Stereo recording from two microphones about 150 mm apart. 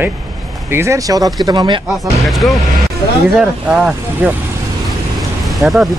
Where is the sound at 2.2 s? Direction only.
Centre (ahead or behind).